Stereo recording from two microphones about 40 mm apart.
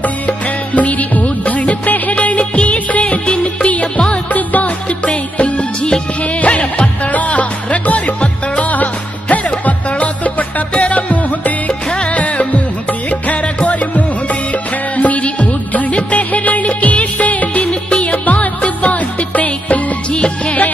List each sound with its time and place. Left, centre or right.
0.7 s music: left
15.0 s music: left
16.6 s music of bollywood: left
17.6 s music: left
18.1 s music: left